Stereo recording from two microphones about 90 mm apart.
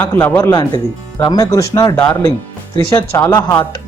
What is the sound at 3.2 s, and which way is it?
Speech, 20° left (ahead or behind).